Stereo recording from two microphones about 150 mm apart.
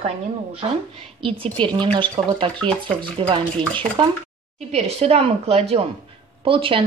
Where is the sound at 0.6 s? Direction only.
40° right (ahead or behind).